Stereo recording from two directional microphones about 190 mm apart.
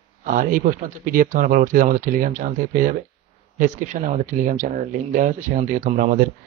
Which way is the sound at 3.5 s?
45° right (ahead or behind).